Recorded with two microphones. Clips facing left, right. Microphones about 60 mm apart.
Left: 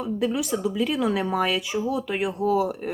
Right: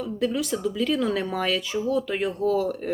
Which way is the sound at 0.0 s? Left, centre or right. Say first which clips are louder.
Left 1 dB; centre.